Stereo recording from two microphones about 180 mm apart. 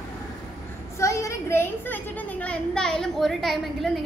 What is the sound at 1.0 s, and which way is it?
A woman's voice, 15° left (ahead or behind).